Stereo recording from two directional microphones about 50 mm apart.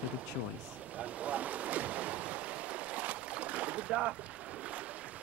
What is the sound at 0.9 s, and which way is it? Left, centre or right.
Ocean, right.